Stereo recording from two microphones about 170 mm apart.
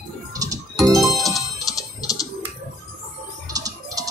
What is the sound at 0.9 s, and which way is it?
Music, centre (ahead or behind).